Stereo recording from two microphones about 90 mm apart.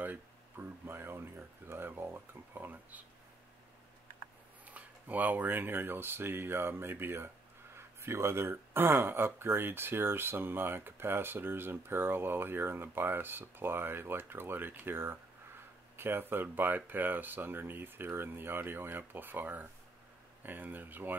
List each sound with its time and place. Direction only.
0.0 s speech: 20° right (ahead or behind)
4.6 s speech: 15° right (ahead or behind)